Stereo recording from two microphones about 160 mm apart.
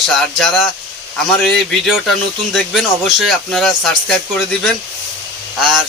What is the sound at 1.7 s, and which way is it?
Speech, centre (ahead or behind).